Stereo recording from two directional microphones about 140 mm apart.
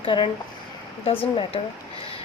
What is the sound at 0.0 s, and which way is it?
A woman's voice, 35° left (ahead or behind).